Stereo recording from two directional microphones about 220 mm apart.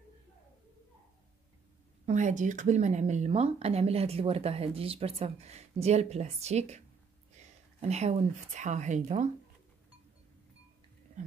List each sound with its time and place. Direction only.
2.0 s speech: 35° right (ahead or behind)